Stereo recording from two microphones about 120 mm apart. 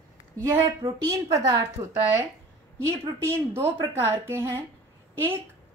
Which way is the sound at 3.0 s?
20° right (ahead or behind).